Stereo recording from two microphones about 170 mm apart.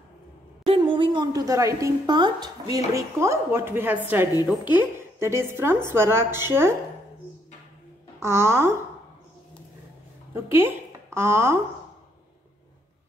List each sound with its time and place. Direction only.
0.7 s a woman's voice: 30° right (ahead or behind); by 6.7 s 15° right (ahead or behind)
8.2 s a woman's voice: 15° right (ahead or behind)
10.3 s a woman's voice: 15° right (ahead or behind)